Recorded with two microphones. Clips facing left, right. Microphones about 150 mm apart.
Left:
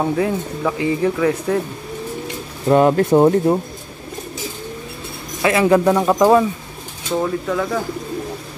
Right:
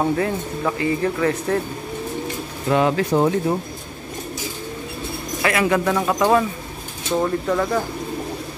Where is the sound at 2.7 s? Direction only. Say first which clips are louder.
Left 5 dB; 45° left (ahead or behind).